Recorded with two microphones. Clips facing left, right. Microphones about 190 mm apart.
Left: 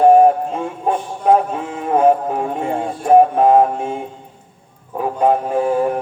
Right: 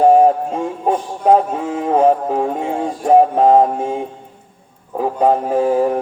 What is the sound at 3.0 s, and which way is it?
Music, 35° right (ahead or behind).